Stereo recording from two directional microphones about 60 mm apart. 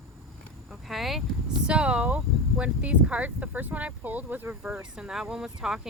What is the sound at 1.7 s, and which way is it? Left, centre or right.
Speech, centre.